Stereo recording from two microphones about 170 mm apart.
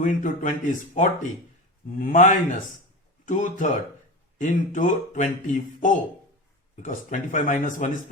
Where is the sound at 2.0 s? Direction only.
50° left (ahead or behind).